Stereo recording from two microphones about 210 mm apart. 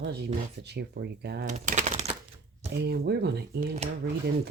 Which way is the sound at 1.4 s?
35° right (ahead or behind).